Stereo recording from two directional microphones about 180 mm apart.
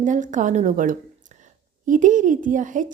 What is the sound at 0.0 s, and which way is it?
Speech, 45° right (ahead or behind).